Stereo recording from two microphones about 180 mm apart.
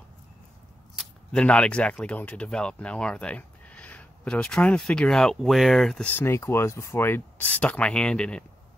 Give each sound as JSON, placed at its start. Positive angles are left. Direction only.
{"t": 0.9, "sound": "speech", "side_deg": 5}